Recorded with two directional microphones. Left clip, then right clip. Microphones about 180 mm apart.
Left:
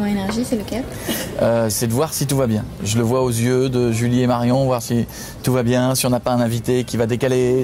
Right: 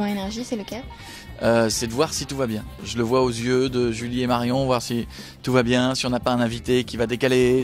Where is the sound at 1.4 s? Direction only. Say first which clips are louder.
Left 2 dB; 35° right (ahead or behind).